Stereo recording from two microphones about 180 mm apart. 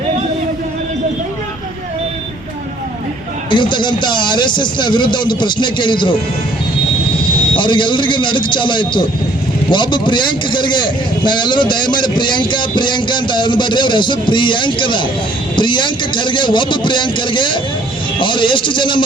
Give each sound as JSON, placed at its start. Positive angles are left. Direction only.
{"t": 3.5, "sound": "a man's voice", "side_deg": 25}
{"t": 7.5, "sound": "a man's voice", "side_deg": 25}